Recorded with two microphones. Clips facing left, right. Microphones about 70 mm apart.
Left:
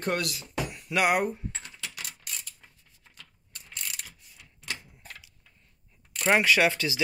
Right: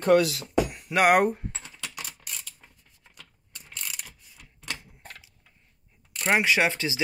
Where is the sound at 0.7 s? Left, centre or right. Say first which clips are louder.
Right 3 dB; right.